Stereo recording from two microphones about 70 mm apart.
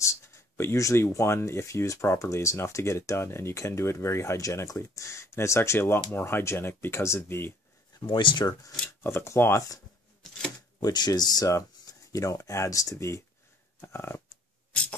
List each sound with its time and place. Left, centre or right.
0.0 s speech: left
8.0 s speech: left
9.0 s speech: left
10.8 s speech: left
13.7 s dog: left